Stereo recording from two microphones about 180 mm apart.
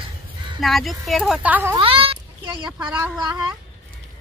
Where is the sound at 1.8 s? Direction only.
30° right (ahead or behind).